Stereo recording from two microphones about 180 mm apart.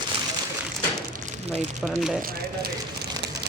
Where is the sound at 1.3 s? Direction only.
35° right (ahead or behind).